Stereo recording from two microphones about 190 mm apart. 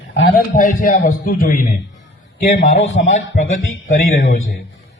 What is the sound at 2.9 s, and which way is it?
Speech, 75° left (ahead or behind).